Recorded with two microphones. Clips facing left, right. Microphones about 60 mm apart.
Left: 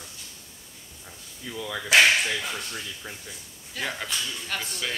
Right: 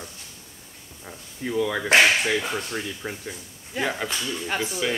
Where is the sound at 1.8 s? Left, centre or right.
Right.